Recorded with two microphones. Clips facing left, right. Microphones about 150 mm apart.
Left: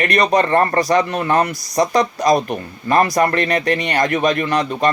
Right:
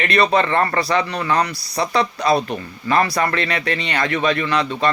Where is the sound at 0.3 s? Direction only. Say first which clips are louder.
Left 3 dB; 45° left (ahead or behind).